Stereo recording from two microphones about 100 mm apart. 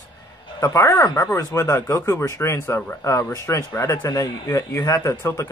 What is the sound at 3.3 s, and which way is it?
Speech, 35° left (ahead or behind).